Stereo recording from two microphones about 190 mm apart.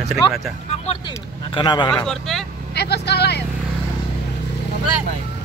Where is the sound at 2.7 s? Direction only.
60° left (ahead or behind).